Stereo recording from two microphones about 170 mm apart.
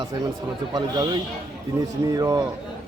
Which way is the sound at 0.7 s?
20° right (ahead or behind).